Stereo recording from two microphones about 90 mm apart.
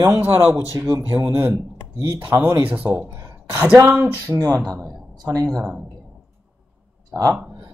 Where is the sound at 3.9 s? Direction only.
25° right (ahead or behind).